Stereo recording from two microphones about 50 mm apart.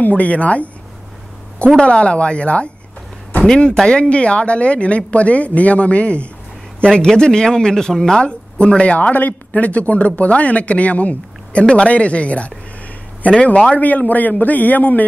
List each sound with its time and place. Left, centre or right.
0.0 s speech: left
1.8 s speech: left
7.1 s speech: centre
13.7 s speech: left